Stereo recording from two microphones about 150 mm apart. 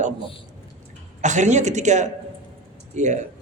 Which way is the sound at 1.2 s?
55° right (ahead or behind).